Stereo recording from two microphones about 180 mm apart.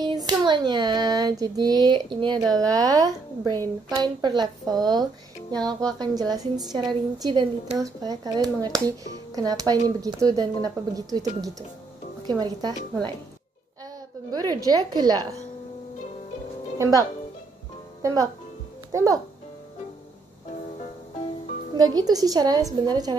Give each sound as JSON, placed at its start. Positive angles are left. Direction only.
{"t": 0.3, "sound": "speech", "side_deg": -25}
{"t": 14.3, "sound": "speech", "side_deg": -20}
{"t": 16.7, "sound": "speech", "side_deg": -15}
{"t": 18.0, "sound": "a child's voice", "side_deg": -20}
{"t": 21.7, "sound": "speech", "side_deg": -20}